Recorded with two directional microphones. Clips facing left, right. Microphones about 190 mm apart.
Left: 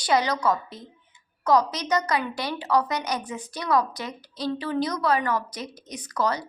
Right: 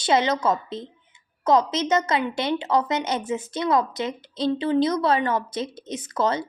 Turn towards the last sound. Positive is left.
turn(degrees=-25)  # may be behind; listen again after turning